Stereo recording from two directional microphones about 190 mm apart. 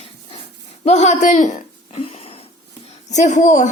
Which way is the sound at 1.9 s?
30° left (ahead or behind).